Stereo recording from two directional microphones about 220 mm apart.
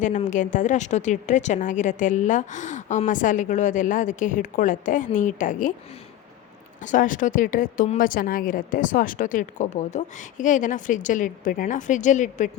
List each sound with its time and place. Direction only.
0.0 s a woman's voice: 35° left (ahead or behind)
6.8 s a woman's voice: 35° left (ahead or behind)